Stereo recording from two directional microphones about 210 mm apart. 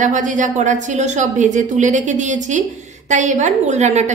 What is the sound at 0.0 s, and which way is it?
A woman's voice, 35° right (ahead or behind).